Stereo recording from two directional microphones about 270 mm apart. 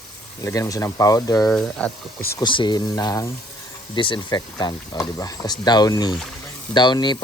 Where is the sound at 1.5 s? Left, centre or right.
Centre.